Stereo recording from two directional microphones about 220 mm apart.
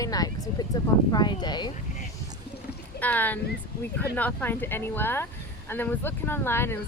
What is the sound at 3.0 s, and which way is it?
Speech, 5° left (ahead or behind).